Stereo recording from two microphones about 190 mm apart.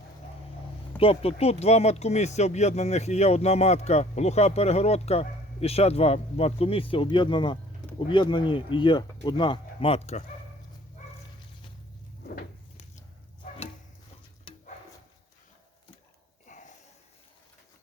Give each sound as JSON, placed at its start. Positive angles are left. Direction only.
{"t": 0.9, "sound": "speech", "side_deg": 30}
{"t": 12.7, "sound": "a sound", "side_deg": 35}
{"t": 16.5, "sound": "snort", "side_deg": 40}